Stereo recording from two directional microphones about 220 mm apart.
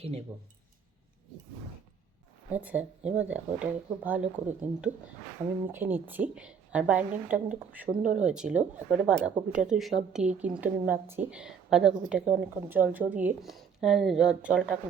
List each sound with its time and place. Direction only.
2.5 s speech: 5° right (ahead or behind)
7.9 s speech: 35° right (ahead or behind)
8.2 s speech: 5° right (ahead or behind)